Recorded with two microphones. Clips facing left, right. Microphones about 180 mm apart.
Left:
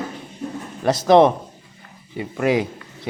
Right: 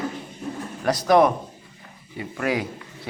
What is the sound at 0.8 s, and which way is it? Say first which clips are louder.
Speech: left 4 dB; 25° left (ahead or behind).